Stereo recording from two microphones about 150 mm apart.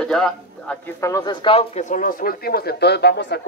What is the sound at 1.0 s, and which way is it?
Speech, 25° left (ahead or behind).